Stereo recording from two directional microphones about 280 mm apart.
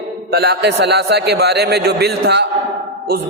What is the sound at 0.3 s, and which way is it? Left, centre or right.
A man's voice, right.